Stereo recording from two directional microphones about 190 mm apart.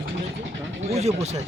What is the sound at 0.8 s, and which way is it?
Speech, 35° right (ahead or behind).